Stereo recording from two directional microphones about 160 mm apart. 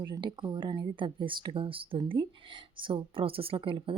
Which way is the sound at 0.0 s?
30° right (ahead or behind).